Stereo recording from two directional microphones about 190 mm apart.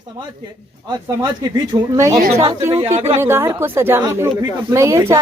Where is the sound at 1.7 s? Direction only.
20° right (ahead or behind).